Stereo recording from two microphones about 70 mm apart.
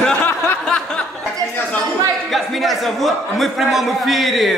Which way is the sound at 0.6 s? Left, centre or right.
Centre.